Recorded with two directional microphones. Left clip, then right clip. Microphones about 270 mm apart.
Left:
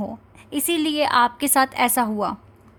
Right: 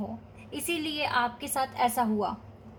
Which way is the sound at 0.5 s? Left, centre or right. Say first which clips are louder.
Left 9 dB; left.